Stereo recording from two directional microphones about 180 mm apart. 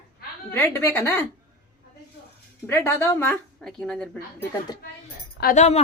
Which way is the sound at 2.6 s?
10° left (ahead or behind).